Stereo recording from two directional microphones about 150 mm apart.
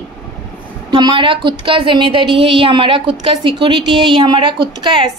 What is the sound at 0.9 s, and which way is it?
A woman's voice, 30° right (ahead or behind).